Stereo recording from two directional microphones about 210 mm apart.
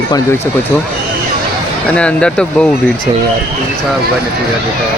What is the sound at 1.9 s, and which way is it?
Speech, 5° left (ahead or behind).